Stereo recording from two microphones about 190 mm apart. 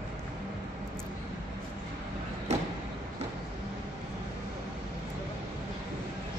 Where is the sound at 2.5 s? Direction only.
35° right (ahead or behind).